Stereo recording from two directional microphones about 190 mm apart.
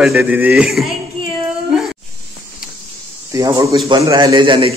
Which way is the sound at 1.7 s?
Centre (ahead or behind).